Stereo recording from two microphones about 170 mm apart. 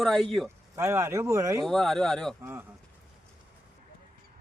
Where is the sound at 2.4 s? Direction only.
10° right (ahead or behind).